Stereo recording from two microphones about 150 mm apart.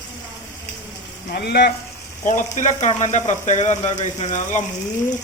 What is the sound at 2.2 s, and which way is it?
Speech, 55° left (ahead or behind).